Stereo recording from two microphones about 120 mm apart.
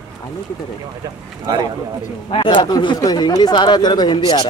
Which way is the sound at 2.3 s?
45° left (ahead or behind).